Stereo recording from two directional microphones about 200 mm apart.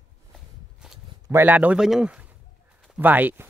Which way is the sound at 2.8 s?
5° right (ahead or behind).